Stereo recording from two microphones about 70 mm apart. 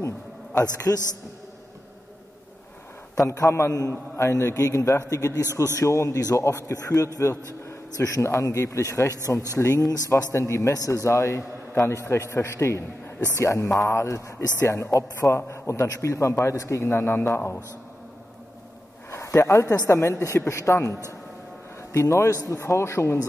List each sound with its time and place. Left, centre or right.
0.6 s a man's voice: left
3.3 s a man's voice: left
5.5 s a man's voice: right
5.8 s a man's voice: left
19.0 s speech: left
20.0 s a man's voice: left